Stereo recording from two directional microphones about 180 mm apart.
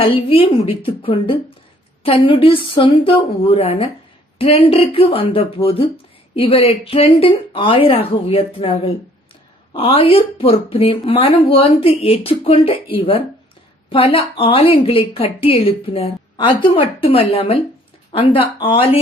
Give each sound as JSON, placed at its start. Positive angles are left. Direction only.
{"t": 0.0, "sound": "a woman's voice", "side_deg": 30}